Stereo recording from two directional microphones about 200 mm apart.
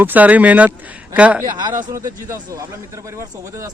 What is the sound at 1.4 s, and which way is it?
Speech, 20° right (ahead or behind).